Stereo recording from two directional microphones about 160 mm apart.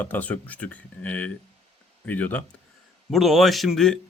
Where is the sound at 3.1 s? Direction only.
Centre (ahead or behind).